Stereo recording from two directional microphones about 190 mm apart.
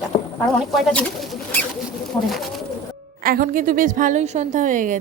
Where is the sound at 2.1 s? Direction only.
15° left (ahead or behind).